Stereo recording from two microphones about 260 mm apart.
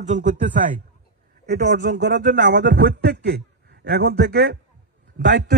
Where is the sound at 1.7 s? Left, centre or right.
Right.